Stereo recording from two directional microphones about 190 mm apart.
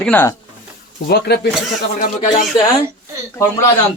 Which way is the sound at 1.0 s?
55° left (ahead or behind).